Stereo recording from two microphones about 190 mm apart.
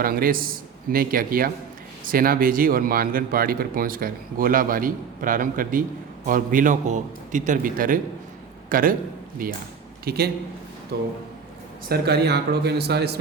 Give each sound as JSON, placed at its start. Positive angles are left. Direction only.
{"t": 0.0, "sound": "a man's voice", "side_deg": -50}